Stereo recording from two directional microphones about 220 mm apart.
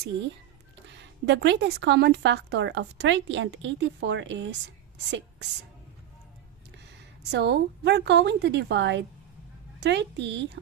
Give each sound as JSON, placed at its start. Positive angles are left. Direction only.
{"t": 0.9, "sound": "a woman's voice", "side_deg": -50}
{"t": 7.3, "sound": "a woman's voice", "side_deg": -50}